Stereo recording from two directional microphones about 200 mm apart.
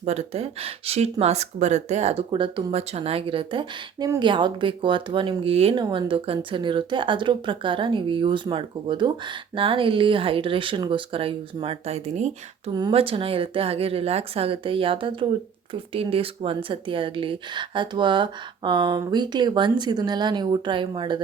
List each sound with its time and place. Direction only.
0.0 s speech: 30° right (ahead or behind)